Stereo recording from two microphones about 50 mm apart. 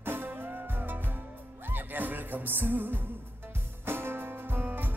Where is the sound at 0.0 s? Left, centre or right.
Right.